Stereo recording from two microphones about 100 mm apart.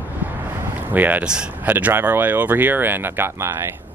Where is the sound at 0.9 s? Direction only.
15° right (ahead or behind).